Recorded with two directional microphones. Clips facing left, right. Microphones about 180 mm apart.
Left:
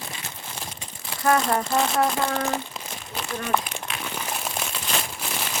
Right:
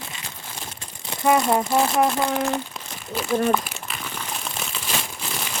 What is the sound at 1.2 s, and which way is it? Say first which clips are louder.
Speech: right 3 dB; 15° right (ahead or behind).